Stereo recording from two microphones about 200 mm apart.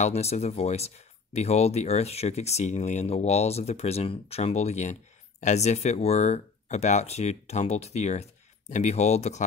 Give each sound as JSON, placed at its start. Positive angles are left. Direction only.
{"t": 0.0, "sound": "speech", "side_deg": 30}